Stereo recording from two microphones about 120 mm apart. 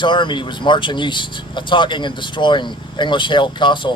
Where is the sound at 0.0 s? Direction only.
40° left (ahead or behind).